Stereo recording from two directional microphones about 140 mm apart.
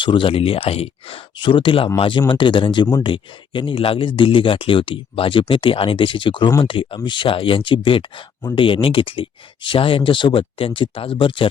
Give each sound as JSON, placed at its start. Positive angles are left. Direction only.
{"t": 0.0, "sound": "speech", "side_deg": 35}